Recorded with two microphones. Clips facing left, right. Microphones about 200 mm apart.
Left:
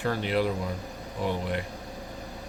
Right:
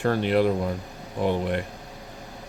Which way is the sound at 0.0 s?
55° right (ahead or behind).